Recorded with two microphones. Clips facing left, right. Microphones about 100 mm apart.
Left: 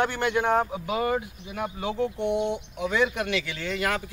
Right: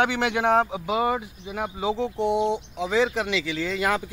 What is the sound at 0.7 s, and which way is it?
Speech, 15° right (ahead or behind).